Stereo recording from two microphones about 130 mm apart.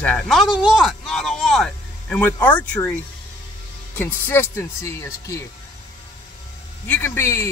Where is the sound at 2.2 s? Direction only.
15° left (ahead or behind).